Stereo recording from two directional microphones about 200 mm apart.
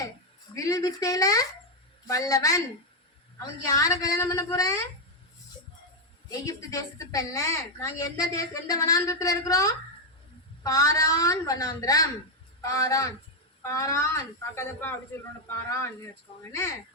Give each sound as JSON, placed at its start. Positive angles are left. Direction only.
{"t": 0.5, "sound": "a woman's voice", "side_deg": 15}
{"t": 3.7, "sound": "a woman's voice", "side_deg": 15}
{"t": 6.4, "sound": "a woman's voice", "side_deg": 15}
{"t": 16.4, "sound": "a woman's voice", "side_deg": 15}